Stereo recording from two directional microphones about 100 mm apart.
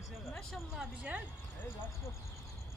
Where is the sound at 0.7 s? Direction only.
15° right (ahead or behind).